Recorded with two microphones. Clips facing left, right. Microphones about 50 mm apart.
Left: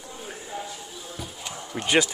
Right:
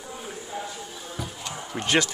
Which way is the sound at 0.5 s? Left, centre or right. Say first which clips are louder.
Right 1 dB; centre.